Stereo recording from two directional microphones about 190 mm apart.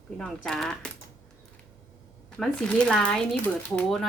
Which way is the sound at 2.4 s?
5° left (ahead or behind).